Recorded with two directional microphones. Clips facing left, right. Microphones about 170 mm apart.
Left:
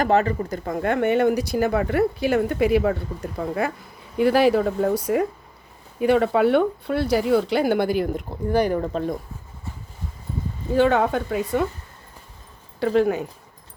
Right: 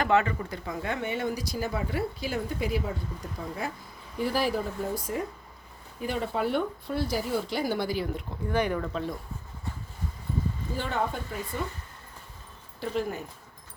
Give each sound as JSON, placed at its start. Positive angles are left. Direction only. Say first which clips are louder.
{"t": 0.0, "sound": "speech", "louder": "left 5 dB", "side_deg": 40}
{"t": 10.8, "sound": "speech", "louder": "left 13 dB", "side_deg": 80}
{"t": 12.8, "sound": "speech", "louder": "left 11 dB", "side_deg": 80}